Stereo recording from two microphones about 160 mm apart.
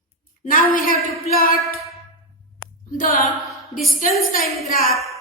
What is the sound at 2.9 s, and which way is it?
A woman's voice, 60° left (ahead or behind).